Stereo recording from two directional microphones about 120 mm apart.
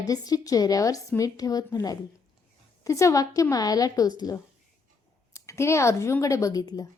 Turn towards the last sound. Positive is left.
turn(degrees=30)  # may be behind; listen again after turning